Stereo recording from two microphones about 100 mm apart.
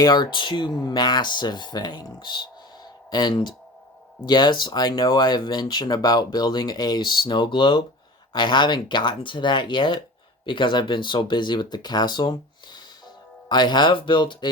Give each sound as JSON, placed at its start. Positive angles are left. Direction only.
{"t": 0.0, "sound": "speech", "side_deg": 45}
{"t": 13.5, "sound": "speech", "side_deg": 45}